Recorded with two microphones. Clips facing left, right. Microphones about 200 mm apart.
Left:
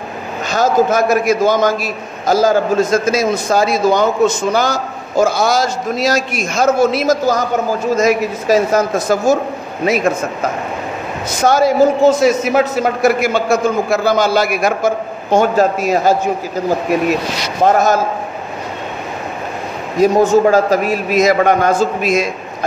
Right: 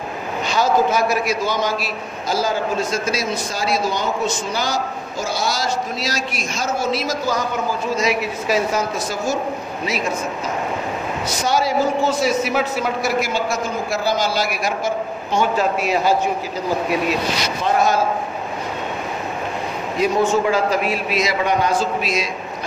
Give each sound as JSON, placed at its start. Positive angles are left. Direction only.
{"t": 0.5, "sound": "a man's voice", "side_deg": 45}
{"t": 17.6, "sound": "a man's voice", "side_deg": 45}
{"t": 20.0, "sound": "a man's voice", "side_deg": 40}